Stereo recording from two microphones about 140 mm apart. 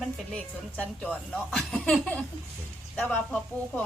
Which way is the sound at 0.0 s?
5° left (ahead or behind).